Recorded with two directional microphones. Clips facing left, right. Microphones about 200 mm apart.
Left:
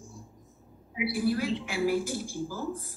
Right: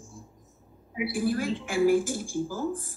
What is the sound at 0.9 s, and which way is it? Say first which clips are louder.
A woman's voice: even; 50° right (ahead or behind).